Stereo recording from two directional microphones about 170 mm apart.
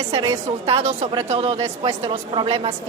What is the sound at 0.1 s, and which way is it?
A woman's voice, 25° right (ahead or behind).